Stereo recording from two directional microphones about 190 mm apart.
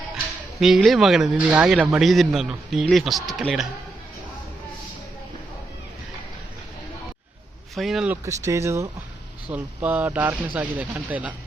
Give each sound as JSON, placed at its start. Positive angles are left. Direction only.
{"t": 0.6, "sound": "speech", "side_deg": 0}
{"t": 7.8, "sound": "speech", "side_deg": 0}